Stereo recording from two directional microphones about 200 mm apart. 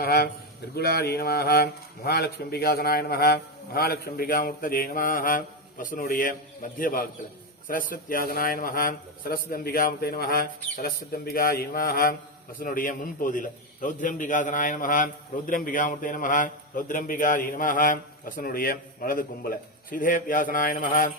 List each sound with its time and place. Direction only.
0.0 s a man's voice: 50° left (ahead or behind)